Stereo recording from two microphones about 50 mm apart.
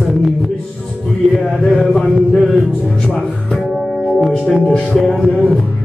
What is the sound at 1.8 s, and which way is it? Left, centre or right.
Music, centre.